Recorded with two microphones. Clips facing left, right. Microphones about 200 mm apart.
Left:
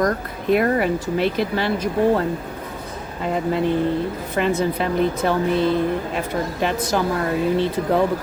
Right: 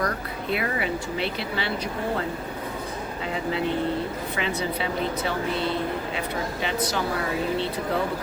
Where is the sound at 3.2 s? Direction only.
50° left (ahead or behind).